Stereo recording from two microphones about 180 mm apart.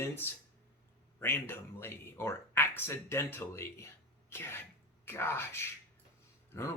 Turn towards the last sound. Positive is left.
turn(degrees=15)  # may be behind; listen again after turning